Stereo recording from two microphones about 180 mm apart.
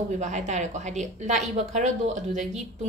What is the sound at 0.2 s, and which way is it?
Speech, 40° right (ahead or behind).